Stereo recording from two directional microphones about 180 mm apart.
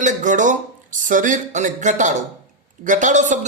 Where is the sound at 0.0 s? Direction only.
45° right (ahead or behind).